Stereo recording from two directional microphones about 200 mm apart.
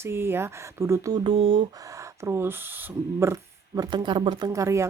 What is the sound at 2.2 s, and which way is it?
Speech, 10° right (ahead or behind).